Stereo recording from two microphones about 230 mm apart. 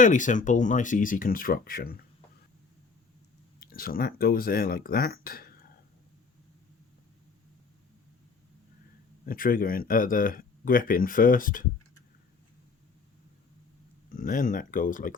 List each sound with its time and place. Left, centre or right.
0.0 s speech: left
3.6 s speech: left
9.2 s speech: left
14.1 s speech: left